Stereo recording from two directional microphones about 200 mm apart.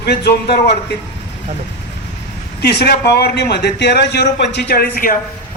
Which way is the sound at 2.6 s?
55° left (ahead or behind).